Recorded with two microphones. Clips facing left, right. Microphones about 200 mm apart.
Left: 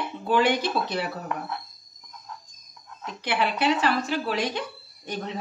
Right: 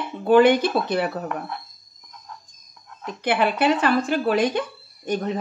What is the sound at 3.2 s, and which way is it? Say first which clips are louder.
Speech: right 5 dB; 55° right (ahead or behind).